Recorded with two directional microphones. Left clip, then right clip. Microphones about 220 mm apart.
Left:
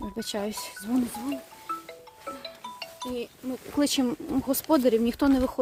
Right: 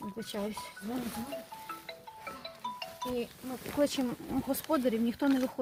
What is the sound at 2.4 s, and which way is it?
Music, 45° left (ahead or behind).